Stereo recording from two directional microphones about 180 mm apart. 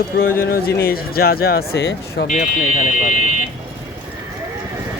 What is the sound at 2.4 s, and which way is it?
Speech, 45° left (ahead or behind).